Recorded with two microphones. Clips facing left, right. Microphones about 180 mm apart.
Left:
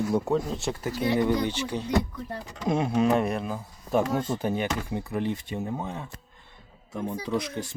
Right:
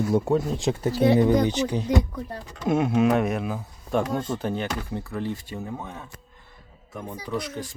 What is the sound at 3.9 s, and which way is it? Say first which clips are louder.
Speech: even; 10° left (ahead or behind).